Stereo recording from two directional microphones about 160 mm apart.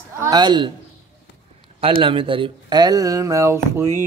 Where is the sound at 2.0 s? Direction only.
30° right (ahead or behind).